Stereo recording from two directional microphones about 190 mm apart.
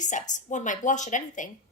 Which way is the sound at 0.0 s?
40° left (ahead or behind).